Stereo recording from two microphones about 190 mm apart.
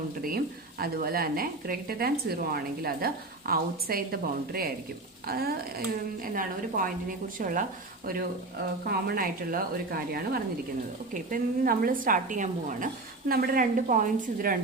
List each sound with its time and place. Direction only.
0.2 s a woman's voice: 50° right (ahead or behind)
8.9 s a woman's voice: 50° right (ahead or behind)